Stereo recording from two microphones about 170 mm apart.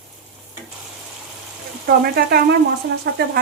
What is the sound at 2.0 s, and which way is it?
Speech, 70° right (ahead or behind).